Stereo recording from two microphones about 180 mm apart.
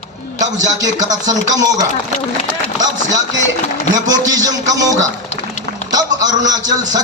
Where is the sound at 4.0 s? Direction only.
20° right (ahead or behind).